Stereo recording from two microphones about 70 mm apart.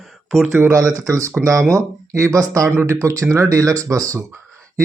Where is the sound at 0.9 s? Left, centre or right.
Right.